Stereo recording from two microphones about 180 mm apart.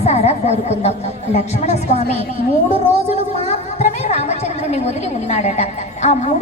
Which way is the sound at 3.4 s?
35° left (ahead or behind).